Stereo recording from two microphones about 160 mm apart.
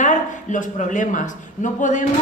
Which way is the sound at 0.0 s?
50° left (ahead or behind).